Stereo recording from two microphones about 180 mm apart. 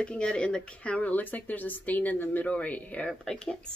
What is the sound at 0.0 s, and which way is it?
Speech, 5° left (ahead or behind).